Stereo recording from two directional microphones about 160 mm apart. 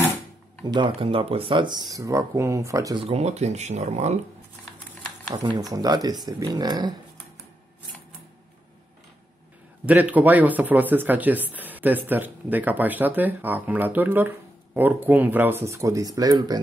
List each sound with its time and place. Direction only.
0.7 s speech: 30° right (ahead or behind)
3.0 s speech: 40° right (ahead or behind)
5.3 s speech: 30° right (ahead or behind)
9.8 s speech: 10° right (ahead or behind)